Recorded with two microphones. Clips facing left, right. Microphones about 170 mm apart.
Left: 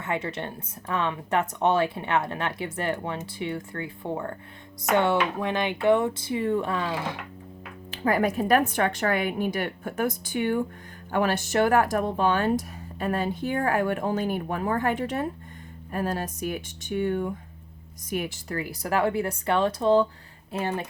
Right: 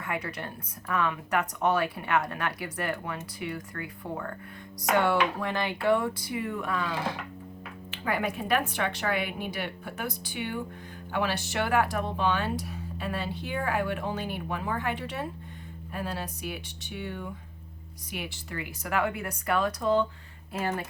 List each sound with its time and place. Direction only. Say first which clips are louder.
0.0 s speech: left 4 dB; 25° left (ahead or behind)
7.9 s speech: left 6 dB; 40° left (ahead or behind)